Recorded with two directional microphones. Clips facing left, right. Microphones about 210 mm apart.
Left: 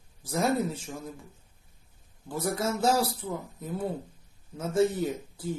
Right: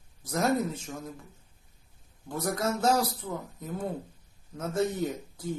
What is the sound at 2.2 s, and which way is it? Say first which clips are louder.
Speech: even; 5° left (ahead or behind).